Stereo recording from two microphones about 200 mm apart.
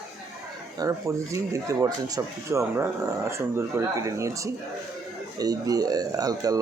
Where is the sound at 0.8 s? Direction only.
15° right (ahead or behind).